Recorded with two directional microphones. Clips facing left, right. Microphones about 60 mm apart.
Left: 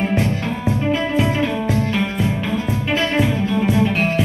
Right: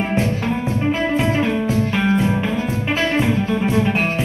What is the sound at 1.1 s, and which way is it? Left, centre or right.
Music, right.